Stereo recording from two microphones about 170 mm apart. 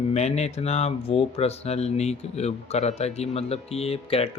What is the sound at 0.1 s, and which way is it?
Speech, 40° left (ahead or behind).